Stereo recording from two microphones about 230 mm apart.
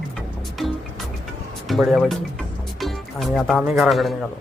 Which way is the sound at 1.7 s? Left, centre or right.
Centre.